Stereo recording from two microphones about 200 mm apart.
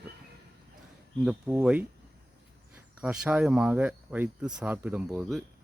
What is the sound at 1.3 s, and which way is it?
Speech, 10° right (ahead or behind).